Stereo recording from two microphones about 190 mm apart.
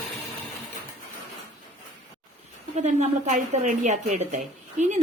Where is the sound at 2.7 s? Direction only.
35° right (ahead or behind).